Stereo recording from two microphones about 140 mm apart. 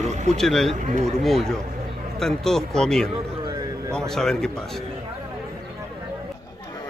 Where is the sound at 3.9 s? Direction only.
5° left (ahead or behind).